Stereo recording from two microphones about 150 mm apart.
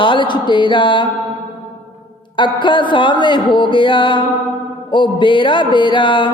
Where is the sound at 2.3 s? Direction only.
30° left (ahead or behind).